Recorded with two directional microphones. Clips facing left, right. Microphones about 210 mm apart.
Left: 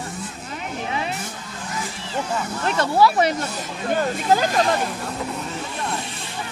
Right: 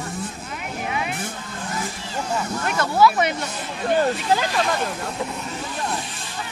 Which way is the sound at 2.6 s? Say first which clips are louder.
Left 1 dB; 30° left (ahead or behind).